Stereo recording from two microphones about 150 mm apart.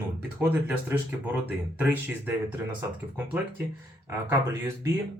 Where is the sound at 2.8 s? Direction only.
15° right (ahead or behind).